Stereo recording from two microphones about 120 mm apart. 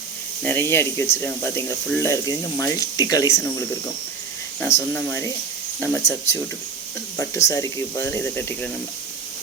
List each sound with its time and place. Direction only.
0.4 s speech: 20° left (ahead or behind)